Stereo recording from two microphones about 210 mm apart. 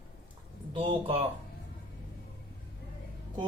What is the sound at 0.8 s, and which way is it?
Speech, 25° right (ahead or behind).